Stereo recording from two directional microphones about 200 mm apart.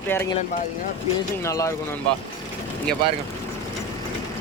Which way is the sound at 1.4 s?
15° left (ahead or behind).